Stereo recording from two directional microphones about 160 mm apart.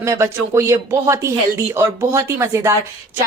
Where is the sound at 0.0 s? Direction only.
20° right (ahead or behind).